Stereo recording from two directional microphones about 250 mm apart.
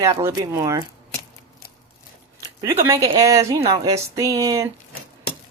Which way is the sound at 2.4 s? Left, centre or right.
Centre.